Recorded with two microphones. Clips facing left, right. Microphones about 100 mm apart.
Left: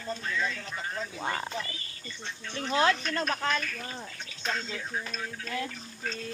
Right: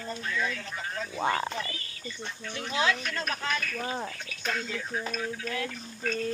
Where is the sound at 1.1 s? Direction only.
90° right.